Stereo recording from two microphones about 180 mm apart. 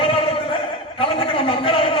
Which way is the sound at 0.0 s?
30° left (ahead or behind).